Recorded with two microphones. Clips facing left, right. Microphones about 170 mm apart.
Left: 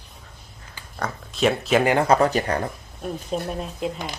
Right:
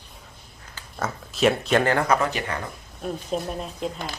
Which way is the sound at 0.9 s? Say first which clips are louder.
Even; centre (ahead or behind).